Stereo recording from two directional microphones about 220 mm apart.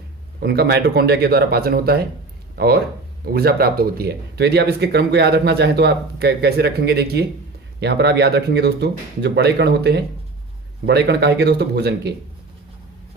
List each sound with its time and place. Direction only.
0.3 s speech: 45° right (ahead or behind)